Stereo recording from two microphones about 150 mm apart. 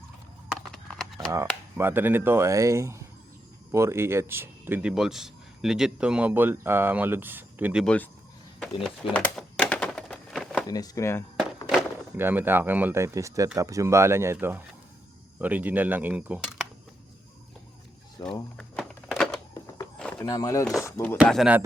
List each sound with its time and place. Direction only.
0.7 s a sound: centre (ahead or behind)
1.3 s speech: 20° right (ahead or behind)
7.9 s speech: 10° left (ahead or behind)
8.5 s a sound: 5° left (ahead or behind)
10.7 s speech: 25° left (ahead or behind)
12.1 s speech: 15° right (ahead or behind)
18.2 s speech: 25° left (ahead or behind)
18.5 s a sound: centre (ahead or behind)
20.2 s speech: 25° left (ahead or behind)
21.2 s speech: centre (ahead or behind)